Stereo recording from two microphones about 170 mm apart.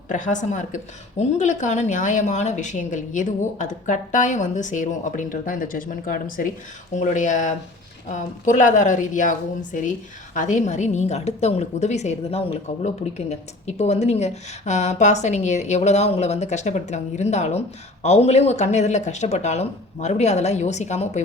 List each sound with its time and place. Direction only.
0.1 s a woman's voice: 45° left (ahead or behind)